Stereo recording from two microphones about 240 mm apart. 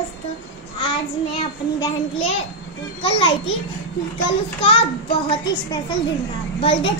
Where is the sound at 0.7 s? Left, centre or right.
Centre.